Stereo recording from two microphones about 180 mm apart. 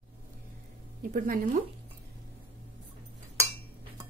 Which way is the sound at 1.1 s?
45° right (ahead or behind).